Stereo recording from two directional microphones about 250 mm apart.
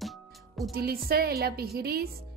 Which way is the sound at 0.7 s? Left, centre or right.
Right.